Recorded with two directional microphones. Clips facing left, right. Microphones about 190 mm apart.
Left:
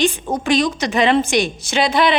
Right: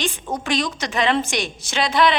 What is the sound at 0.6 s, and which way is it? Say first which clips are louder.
A woman's voice: left 5 dB; 10° left (ahead or behind).